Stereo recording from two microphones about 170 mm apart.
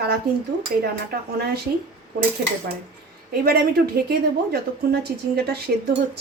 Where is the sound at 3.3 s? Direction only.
65° right (ahead or behind).